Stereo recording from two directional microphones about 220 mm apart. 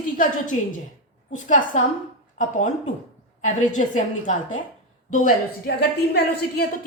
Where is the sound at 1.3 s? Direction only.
35° left (ahead or behind).